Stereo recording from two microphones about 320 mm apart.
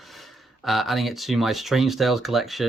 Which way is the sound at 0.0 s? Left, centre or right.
Centre.